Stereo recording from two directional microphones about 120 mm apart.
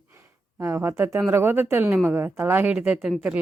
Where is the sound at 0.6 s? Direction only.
20° right (ahead or behind).